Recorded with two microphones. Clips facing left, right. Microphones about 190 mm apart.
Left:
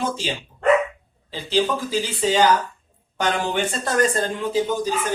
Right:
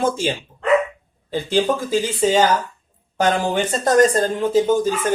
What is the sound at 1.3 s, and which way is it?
Speech, 50° right (ahead or behind).